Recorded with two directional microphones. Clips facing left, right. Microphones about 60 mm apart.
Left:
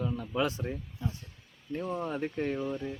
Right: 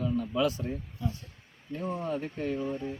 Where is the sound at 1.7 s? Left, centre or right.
Right.